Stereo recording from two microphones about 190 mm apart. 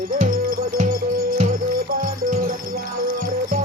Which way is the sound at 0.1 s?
45° right (ahead or behind).